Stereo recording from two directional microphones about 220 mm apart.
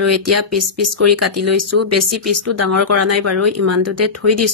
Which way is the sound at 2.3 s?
90° right.